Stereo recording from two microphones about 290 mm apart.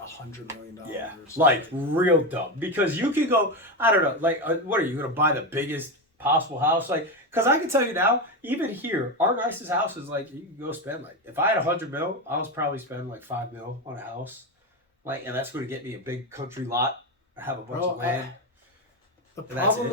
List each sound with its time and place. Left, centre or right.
1.4 s speech: centre
15.0 s speech: centre